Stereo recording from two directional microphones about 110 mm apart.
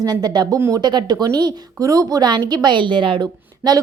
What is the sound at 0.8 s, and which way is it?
A woman's voice, 40° right (ahead or behind).